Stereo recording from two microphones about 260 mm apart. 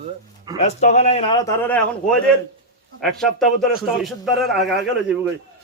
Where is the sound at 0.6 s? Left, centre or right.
Left; by 1.7 s centre.